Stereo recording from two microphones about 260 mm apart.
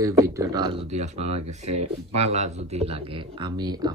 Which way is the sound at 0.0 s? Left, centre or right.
Centre.